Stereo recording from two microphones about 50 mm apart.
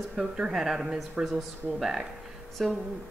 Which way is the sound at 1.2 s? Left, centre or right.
Right.